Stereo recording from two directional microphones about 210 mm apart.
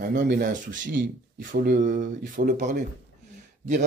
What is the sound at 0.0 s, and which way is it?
Speech, 45° right (ahead or behind).